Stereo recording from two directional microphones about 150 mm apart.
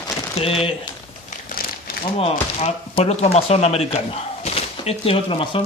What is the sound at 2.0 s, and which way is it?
Speech, 45° left (ahead or behind).